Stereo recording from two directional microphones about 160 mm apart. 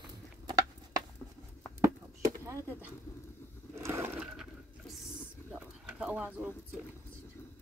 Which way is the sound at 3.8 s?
15° right (ahead or behind).